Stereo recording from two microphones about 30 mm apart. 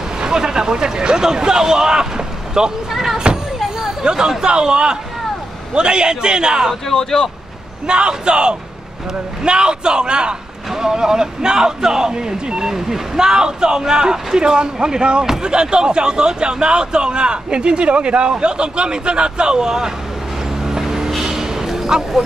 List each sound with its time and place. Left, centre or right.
0.2 s speech: right
2.9 s vehicle: centre
4.0 s speech: right
6.9 s speech: centre
7.8 s a man's voice: right
10.7 s speech: right
20.6 s vehicle: centre
21.2 s a sound: centre